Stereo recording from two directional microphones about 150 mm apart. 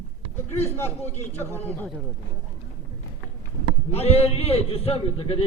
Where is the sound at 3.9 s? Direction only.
45° left (ahead or behind).